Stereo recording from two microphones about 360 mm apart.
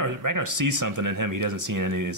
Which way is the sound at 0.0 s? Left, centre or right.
Right.